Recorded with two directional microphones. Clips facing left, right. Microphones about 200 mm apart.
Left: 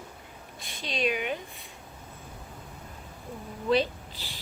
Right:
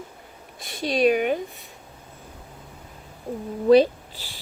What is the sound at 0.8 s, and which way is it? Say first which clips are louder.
Speech: right 10 dB; 45° right (ahead or behind).